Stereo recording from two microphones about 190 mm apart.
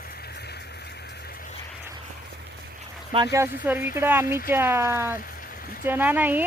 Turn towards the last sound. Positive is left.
turn(degrees=-10)  # may be behind; listen again after turning